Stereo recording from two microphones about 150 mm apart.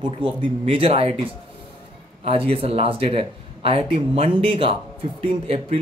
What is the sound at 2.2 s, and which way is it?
Speech, 40° right (ahead or behind).